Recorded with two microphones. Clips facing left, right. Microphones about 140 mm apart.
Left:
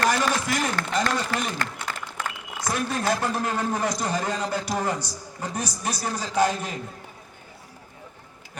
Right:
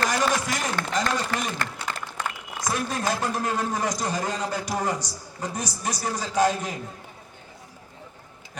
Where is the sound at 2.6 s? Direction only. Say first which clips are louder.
Left 1 dB; 15° right (ahead or behind).